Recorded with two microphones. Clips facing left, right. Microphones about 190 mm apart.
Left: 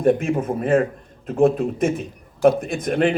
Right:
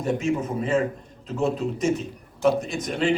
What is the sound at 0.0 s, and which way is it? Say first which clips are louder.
A man's voice: left 6 dB; 55° left (ahead or behind).